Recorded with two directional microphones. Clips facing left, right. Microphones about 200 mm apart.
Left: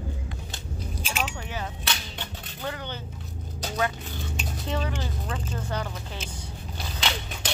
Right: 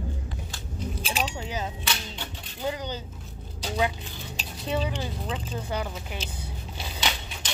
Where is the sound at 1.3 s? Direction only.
20° right (ahead or behind).